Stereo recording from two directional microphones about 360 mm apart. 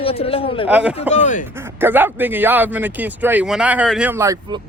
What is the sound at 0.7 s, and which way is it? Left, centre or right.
Speech, centre.